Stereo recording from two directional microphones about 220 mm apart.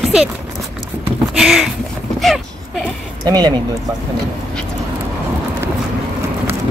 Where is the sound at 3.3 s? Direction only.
20° right (ahead or behind).